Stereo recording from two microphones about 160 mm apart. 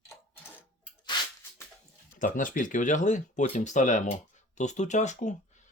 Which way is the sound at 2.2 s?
55° left (ahead or behind).